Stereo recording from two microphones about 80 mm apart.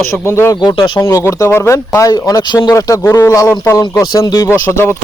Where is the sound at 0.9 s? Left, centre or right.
Left.